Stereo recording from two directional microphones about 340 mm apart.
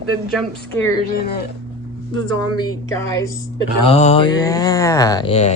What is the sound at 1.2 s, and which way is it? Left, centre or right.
Speech, left.